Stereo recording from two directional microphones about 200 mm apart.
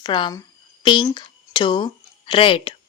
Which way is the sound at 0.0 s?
25° left (ahead or behind).